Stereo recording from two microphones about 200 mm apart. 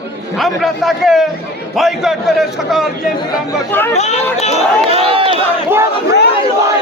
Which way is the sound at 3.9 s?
35° left (ahead or behind).